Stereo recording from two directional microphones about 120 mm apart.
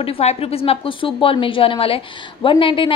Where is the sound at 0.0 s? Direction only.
60° left (ahead or behind).